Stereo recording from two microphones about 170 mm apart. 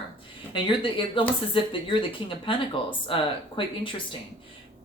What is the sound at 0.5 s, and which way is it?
Speech, 30° left (ahead or behind).